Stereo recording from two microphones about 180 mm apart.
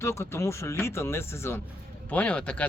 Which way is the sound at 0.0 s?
15° left (ahead or behind).